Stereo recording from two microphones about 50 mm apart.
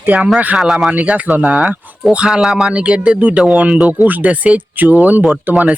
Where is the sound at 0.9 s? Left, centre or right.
Right.